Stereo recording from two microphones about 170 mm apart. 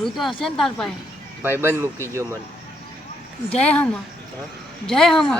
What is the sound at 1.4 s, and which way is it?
Speech, 15° right (ahead or behind).